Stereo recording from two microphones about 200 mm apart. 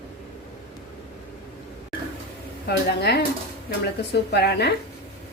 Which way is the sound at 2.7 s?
55° left (ahead or behind).